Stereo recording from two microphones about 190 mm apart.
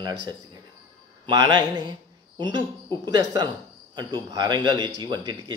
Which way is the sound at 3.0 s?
20° right (ahead or behind).